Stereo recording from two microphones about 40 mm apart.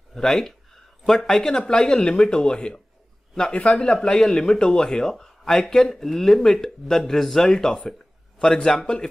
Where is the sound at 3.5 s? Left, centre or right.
Left.